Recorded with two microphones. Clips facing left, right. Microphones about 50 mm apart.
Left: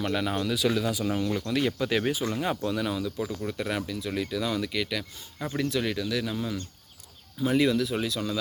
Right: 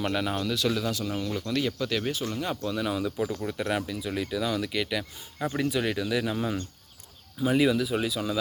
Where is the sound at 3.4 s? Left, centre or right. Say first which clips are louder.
Right 1 dB; centre.